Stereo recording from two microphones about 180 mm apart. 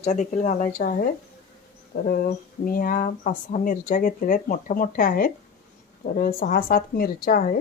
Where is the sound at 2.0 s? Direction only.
50° left (ahead or behind).